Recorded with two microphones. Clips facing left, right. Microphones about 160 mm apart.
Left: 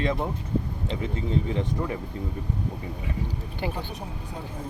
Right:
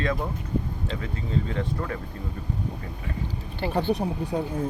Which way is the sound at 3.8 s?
70° right (ahead or behind).